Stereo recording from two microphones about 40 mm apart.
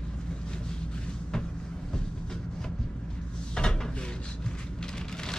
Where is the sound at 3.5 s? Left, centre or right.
Centre.